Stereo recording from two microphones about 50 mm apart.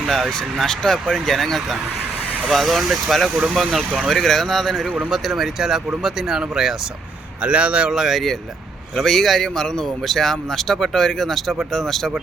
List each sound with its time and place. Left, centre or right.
0.1 s speech: centre
7.4 s speech: right
7.9 s speech: centre
9.0 s speech: centre